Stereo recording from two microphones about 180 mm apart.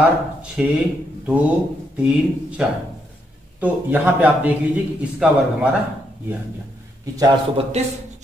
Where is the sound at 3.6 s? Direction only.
10° right (ahead or behind).